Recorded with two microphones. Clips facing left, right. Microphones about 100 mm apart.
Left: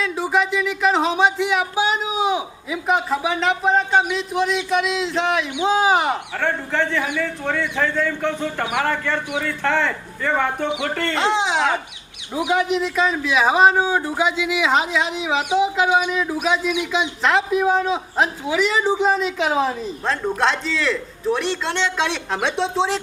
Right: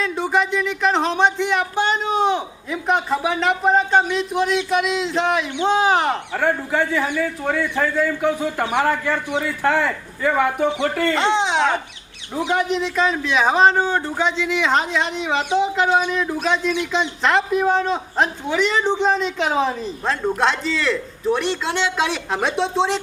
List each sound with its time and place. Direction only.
0.0 s speech: centre (ahead or behind)
6.3 s a man's voice: 10° right (ahead or behind)